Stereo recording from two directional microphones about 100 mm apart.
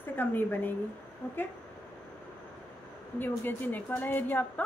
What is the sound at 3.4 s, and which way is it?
A woman's voice, 20° left (ahead or behind).